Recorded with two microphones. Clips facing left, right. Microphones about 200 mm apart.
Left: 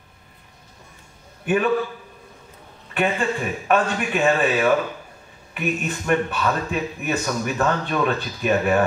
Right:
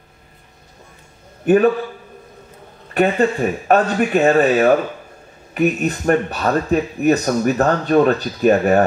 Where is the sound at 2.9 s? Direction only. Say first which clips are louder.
Right 7 dB; 40° right (ahead or behind).